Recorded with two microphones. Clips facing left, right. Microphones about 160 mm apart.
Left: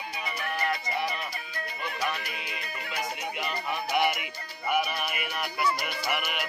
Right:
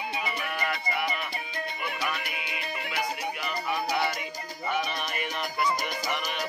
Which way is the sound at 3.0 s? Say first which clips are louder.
Right 1 dB; 20° left (ahead or behind).